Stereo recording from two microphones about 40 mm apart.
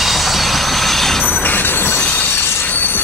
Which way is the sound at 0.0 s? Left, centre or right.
Centre.